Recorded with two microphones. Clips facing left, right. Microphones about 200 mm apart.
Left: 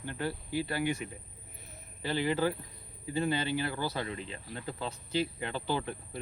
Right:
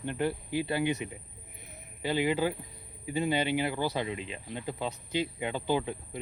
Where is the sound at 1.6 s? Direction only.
15° right (ahead or behind).